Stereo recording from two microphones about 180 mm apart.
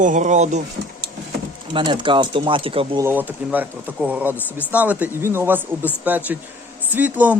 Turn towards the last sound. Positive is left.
turn(degrees=-10)  # may be behind; listen again after turning